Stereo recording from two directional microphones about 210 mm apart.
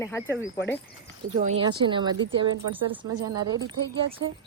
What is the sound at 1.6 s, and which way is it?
Speech, 20° right (ahead or behind).